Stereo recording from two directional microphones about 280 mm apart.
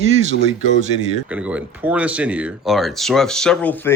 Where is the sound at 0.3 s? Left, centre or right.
Right.